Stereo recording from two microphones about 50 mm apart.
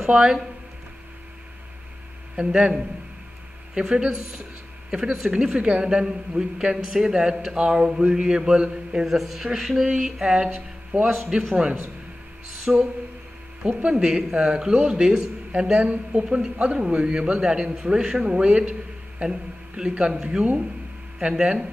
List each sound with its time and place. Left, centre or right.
0.0 s a man's voice: centre
2.3 s a man's voice: centre
3.7 s a man's voice: centre
9.0 s a man's voice: centre
11.1 s a man's voice: centre
13.8 s a man's voice: centre